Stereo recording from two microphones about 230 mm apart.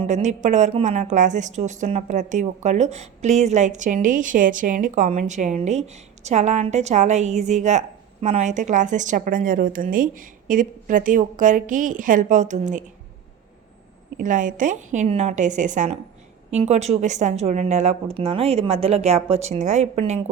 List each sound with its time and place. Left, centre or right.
0.0 s a woman's voice: right
14.2 s a woman's voice: right